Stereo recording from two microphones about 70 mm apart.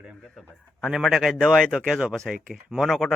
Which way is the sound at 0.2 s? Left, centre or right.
Centre.